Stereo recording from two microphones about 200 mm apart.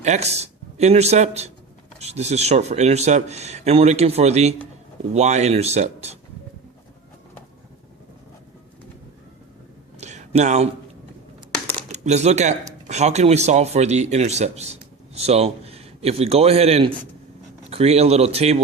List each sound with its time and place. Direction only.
0.0 s a man's voice: 35° right (ahead or behind)
10.0 s a sound: 35° right (ahead or behind)
11.9 s a man's voice: 35° right (ahead or behind)